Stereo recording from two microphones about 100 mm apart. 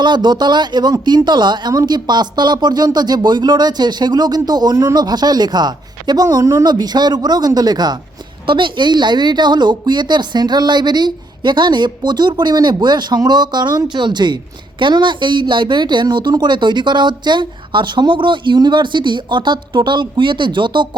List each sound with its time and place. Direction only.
0.0 s a woman's voice: 50° right (ahead or behind)
6.7 s a woman's voice: 45° right (ahead or behind)
8.4 s a woman's voice: 55° right (ahead or behind)